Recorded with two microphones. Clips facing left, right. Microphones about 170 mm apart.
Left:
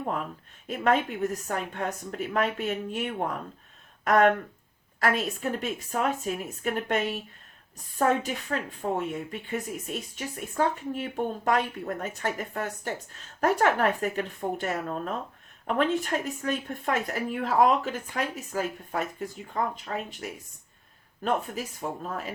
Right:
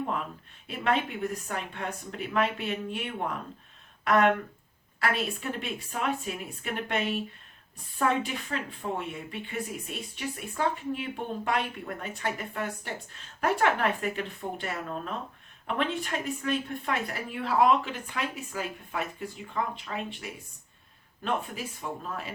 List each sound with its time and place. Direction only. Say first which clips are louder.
0.7 s speech: left 3 dB; 45° left (ahead or behind)
21.2 s speech: left 3 dB; 40° left (ahead or behind)